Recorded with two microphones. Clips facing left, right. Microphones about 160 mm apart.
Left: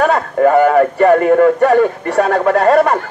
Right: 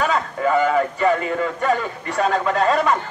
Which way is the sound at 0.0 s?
55° left (ahead or behind).